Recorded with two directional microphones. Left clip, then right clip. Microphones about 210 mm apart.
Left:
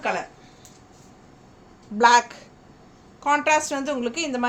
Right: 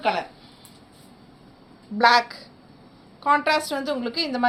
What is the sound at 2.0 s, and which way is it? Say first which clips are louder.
A woman's voice: left 1 dB; 25° left (ahead or behind).